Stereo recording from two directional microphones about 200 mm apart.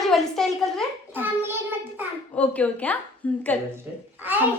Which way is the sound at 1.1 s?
10° right (ahead or behind).